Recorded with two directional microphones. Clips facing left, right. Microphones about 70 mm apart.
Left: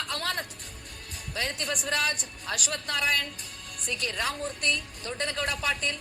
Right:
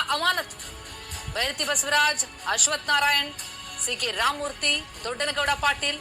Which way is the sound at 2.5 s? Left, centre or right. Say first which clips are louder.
Right 8 dB; right.